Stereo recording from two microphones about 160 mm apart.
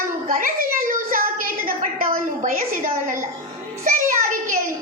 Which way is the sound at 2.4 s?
60° right (ahead or behind).